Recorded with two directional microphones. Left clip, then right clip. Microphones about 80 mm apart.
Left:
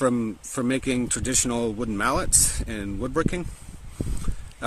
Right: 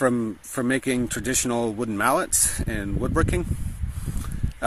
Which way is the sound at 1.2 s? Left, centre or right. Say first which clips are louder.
Right 1 dB; centre.